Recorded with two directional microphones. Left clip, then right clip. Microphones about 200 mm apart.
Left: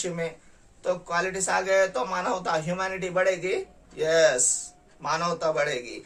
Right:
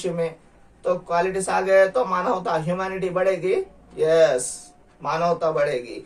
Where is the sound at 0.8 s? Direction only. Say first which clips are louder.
Right 5 dB; 20° left (ahead or behind).